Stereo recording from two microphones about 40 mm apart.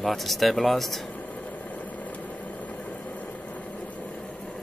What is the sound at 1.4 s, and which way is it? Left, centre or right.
Vehicle, left.